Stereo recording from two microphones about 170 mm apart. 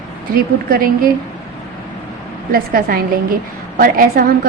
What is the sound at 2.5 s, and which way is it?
A woman's voice, 60° right (ahead or behind).